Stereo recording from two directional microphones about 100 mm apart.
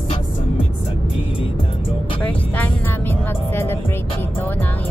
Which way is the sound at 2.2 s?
15° left (ahead or behind).